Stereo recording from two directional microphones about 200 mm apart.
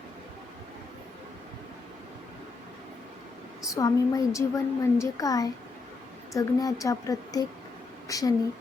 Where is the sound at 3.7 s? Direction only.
15° left (ahead or behind).